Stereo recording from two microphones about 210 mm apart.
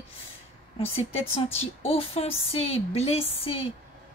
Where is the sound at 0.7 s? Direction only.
25° left (ahead or behind).